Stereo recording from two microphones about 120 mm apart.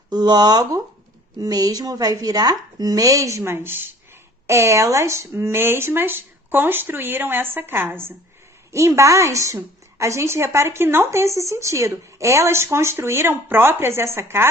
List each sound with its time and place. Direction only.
0.1 s a woman's voice: 35° right (ahead or behind)